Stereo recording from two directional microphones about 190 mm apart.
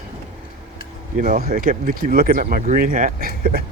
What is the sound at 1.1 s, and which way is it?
Speech, 45° right (ahead or behind).